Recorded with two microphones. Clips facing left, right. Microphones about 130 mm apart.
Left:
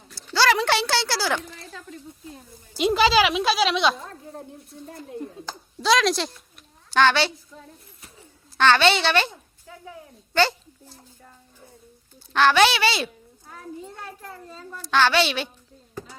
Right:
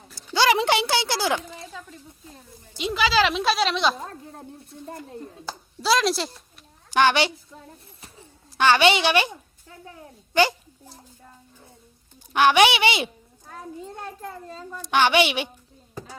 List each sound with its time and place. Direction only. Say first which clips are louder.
0.3 s a woman's voice: right 1 dB; 20° right (ahead or behind)
1.7 s speech: left 1 dB; centre (ahead or behind)
2.7 s speech: left 7 dB; 45° left (ahead or behind)
3.2 s speech: left 1 dB; 5° left (ahead or behind)
5.5 s speech: left 1 dB; 5° right (ahead or behind)
6.9 s a woman's voice: even; 15° right (ahead or behind)
8.5 s a woman's voice: even; 15° right (ahead or behind)
12.3 s a woman's voice: right 1 dB; 15° right (ahead or behind)
14.8 s a woman's voice: right 1 dB; 15° right (ahead or behind)